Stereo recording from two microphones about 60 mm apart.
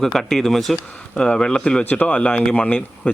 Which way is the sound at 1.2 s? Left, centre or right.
Centre.